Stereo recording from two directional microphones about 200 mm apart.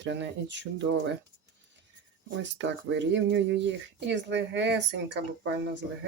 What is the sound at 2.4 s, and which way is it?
Speech, 60° right (ahead or behind).